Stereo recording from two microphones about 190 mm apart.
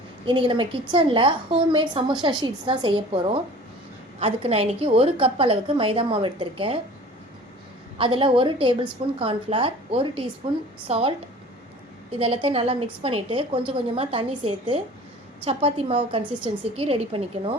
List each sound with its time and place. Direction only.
0.3 s a woman's voice: 25° right (ahead or behind)
7.9 s a woman's voice: 25° right (ahead or behind)
12.2 s a woman's voice: 30° right (ahead or behind)